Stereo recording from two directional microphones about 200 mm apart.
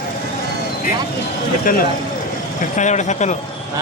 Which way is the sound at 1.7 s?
45° left (ahead or behind).